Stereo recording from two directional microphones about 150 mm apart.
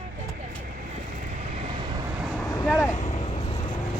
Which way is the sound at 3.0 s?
50° left (ahead or behind).